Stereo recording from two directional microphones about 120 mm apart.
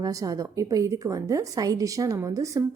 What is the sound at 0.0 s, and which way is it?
Speech, 30° right (ahead or behind).